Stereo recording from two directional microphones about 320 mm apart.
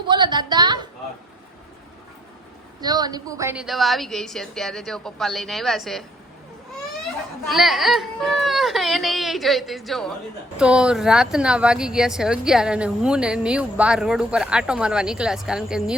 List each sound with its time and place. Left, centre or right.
0.1 s a woman's voice: centre
2.8 s speech: centre
7.4 s speech: centre